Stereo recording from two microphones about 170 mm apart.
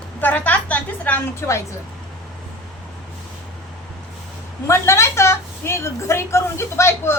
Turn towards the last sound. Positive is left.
turn(degrees=15)  # may be behind; listen again after turning